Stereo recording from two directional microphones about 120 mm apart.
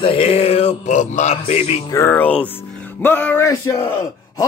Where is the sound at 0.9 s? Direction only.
85° left; by 1.7 s 60° left (ahead or behind).